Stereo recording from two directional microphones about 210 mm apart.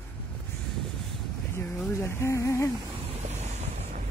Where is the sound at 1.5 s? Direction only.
10° left (ahead or behind).